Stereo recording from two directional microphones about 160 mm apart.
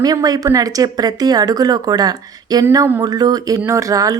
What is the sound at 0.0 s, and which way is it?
Speech, 25° right (ahead or behind).